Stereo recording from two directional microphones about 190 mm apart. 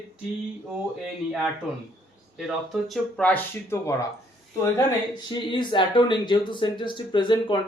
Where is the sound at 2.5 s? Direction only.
Centre (ahead or behind).